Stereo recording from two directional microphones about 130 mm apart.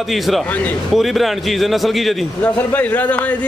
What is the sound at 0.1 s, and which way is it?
A man's voice, centre (ahead or behind).